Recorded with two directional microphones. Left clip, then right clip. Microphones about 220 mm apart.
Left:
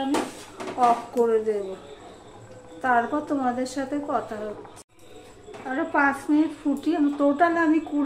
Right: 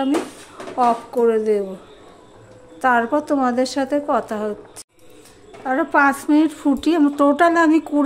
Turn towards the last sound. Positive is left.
turn(degrees=-55)  # may be behind; listen again after turning